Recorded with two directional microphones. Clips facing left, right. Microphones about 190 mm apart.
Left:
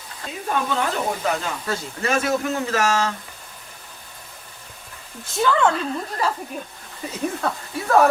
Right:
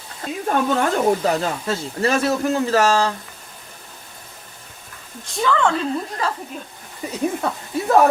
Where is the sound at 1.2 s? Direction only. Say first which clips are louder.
Right 4 dB; 35° right (ahead or behind).